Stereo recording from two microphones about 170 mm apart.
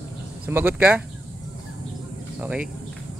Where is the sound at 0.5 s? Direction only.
15° right (ahead or behind).